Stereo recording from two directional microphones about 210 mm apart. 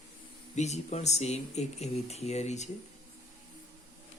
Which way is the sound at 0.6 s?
30° left (ahead or behind).